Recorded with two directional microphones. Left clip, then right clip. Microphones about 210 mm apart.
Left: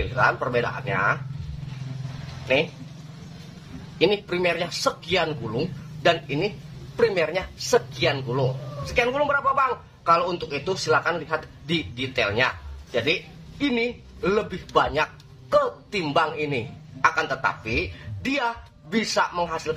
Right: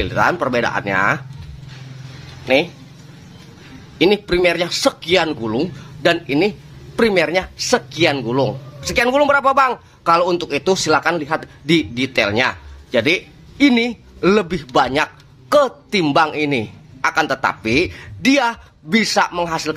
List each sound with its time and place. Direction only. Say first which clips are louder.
0.1 s speech: right 4 dB; 45° right (ahead or behind)
4.0 s speech: right 7 dB; 45° right (ahead or behind)